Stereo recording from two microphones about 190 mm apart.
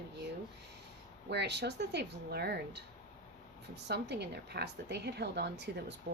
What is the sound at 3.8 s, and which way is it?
A woman's voice, 60° right (ahead or behind).